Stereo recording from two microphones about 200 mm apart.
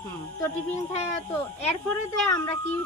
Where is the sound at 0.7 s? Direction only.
35° left (ahead or behind).